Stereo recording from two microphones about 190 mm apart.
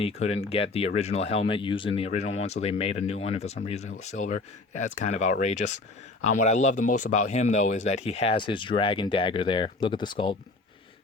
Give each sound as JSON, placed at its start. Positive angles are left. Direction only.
{"t": 0.0, "sound": "speech", "side_deg": 35}
{"t": 8.4, "sound": "speech", "side_deg": 25}